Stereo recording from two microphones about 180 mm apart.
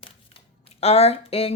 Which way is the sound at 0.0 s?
30° left (ahead or behind).